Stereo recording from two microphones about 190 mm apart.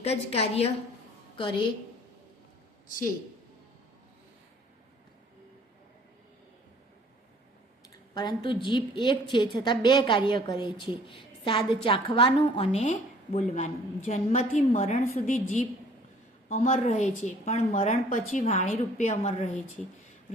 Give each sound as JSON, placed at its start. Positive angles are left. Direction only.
{"t": 0.0, "sound": "a woman's voice", "side_deg": 30}
{"t": 8.1, "sound": "a woman's voice", "side_deg": 25}